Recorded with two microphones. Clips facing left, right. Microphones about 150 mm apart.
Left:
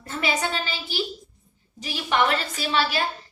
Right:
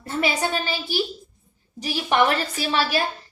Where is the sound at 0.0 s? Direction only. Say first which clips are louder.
Right 3 dB; 40° right (ahead or behind).